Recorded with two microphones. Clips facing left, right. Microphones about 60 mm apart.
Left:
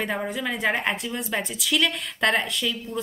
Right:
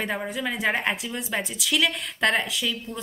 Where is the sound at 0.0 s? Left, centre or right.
Centre.